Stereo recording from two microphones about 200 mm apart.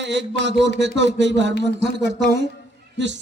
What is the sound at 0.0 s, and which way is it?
A man's voice, 60° right (ahead or behind).